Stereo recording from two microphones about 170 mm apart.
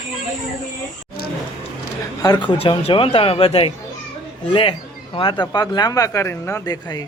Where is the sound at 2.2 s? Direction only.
25° left (ahead or behind).